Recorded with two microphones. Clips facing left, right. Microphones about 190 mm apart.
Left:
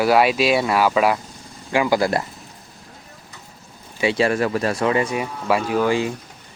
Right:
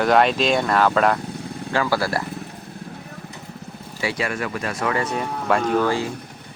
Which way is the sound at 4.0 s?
25° left (ahead or behind).